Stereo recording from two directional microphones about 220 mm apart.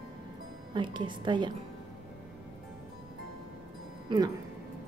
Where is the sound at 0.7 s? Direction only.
20° right (ahead or behind).